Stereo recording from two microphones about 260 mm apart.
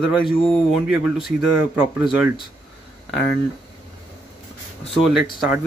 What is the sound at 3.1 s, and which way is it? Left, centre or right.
Speech, left.